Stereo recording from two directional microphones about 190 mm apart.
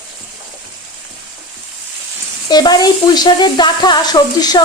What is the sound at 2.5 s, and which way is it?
Speech, 20° left (ahead or behind).